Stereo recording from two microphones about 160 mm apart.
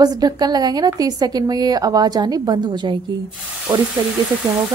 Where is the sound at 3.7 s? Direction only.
10° right (ahead or behind).